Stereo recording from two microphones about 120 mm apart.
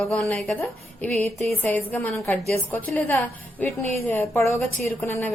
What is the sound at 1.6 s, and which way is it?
A woman's voice, 15° left (ahead or behind).